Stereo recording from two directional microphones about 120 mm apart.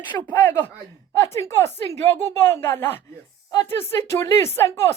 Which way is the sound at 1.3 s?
25° left (ahead or behind).